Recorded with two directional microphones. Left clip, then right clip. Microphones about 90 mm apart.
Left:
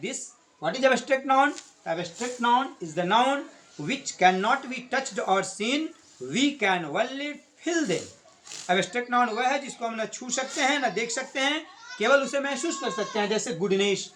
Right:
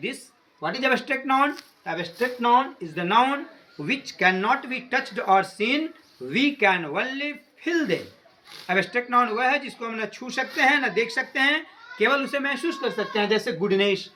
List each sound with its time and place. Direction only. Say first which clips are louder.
0.6 s speech: even; 30° left (ahead or behind)
1.8 s speech: right 4 dB; 25° left (ahead or behind)
13.1 s speech: right 5 dB; 25° left (ahead or behind)
13.7 s speech: right 3 dB; 40° left (ahead or behind)